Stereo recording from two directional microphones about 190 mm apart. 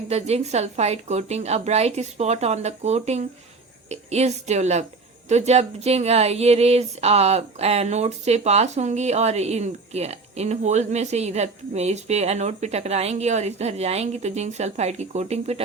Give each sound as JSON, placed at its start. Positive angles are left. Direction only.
{"t": 0.1, "sound": "speech", "side_deg": -35}